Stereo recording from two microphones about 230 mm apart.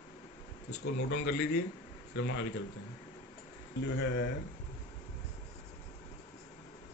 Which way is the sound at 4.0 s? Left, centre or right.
Left.